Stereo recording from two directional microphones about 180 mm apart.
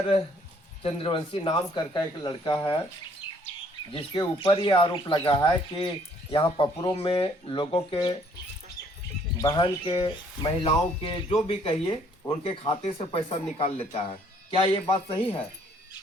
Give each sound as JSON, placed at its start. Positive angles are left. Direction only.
{"t": 0.8, "sound": "speech", "side_deg": 30}
{"t": 3.9, "sound": "speech", "side_deg": 25}
{"t": 9.4, "sound": "speech", "side_deg": 30}